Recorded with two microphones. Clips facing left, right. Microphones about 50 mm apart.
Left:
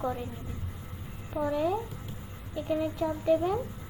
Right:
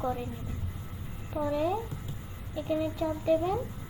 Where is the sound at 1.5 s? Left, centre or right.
Centre.